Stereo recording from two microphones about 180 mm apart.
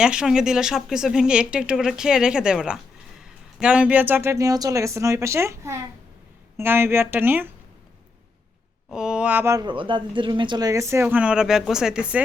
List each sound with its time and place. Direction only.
0.0 s speech: 5° right (ahead or behind)
8.9 s speech: 5° right (ahead or behind)